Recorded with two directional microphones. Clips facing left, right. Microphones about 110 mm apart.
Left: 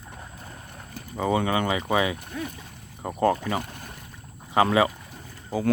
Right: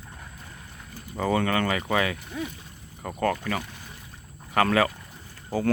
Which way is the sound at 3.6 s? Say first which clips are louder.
Left 4 dB; 55° left (ahead or behind).